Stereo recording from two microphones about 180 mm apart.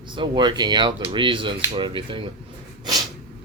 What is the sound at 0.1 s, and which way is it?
Speech, 25° right (ahead or behind).